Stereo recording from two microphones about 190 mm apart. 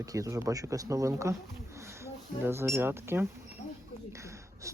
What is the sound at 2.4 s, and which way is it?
Speech, 10° right (ahead or behind).